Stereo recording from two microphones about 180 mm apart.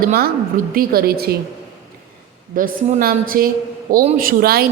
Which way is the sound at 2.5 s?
50° right (ahead or behind).